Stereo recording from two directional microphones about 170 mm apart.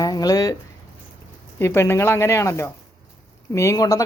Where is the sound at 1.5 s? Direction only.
15° left (ahead or behind).